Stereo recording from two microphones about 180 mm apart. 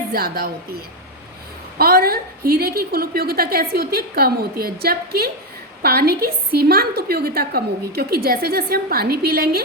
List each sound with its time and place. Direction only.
0.1 s a woman's voice: 55° right (ahead or behind)
1.8 s a woman's voice: 55° right (ahead or behind)